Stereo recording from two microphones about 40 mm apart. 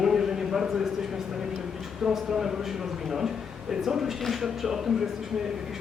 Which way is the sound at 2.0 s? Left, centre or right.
Centre.